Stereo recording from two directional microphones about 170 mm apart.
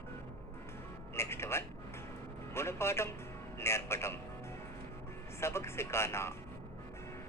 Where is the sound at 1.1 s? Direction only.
15° left (ahead or behind).